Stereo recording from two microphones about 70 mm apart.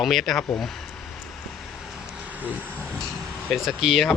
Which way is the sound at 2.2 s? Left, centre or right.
Right.